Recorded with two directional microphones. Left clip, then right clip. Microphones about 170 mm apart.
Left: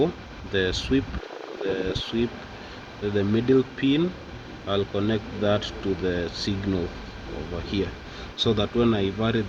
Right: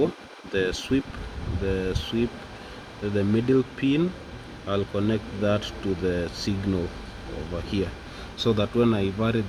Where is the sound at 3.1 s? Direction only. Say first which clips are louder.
Left 1 dB; 50° right (ahead or behind).